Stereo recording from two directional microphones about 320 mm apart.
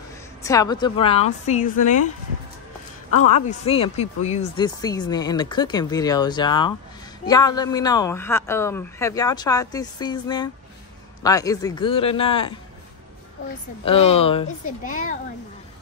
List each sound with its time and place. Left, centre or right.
0.4 s speech: centre
3.3 s speech: left
13.8 s speech: centre